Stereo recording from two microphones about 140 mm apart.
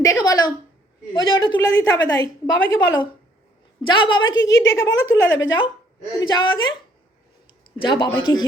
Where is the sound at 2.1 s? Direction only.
25° left (ahead or behind).